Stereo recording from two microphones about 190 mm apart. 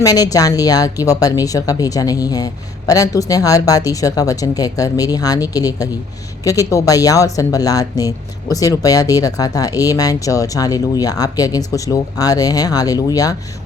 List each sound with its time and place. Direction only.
0.0 s speech: 20° left (ahead or behind)